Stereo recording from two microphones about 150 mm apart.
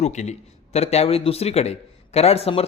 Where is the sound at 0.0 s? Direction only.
50° left (ahead or behind).